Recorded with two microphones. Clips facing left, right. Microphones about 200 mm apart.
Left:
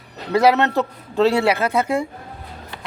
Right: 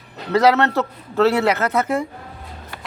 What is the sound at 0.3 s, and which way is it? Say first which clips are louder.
Speech: even; 15° left (ahead or behind).